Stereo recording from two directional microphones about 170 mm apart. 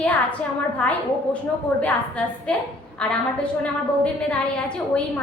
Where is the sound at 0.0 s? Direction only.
10° left (ahead or behind).